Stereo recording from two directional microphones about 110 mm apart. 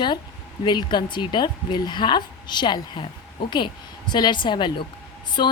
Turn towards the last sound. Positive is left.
turn(degrees=45)  # may be behind; listen again after turning